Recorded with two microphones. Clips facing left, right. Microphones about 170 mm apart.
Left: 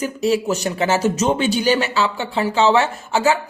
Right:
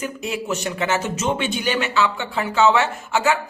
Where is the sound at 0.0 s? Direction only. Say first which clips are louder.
Left 8 dB; 35° left (ahead or behind).